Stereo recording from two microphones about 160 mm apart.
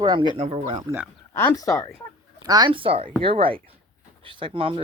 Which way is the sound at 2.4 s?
25° right (ahead or behind).